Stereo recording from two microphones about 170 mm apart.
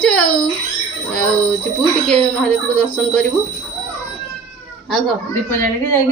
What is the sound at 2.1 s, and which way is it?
Speech, 5° left (ahead or behind).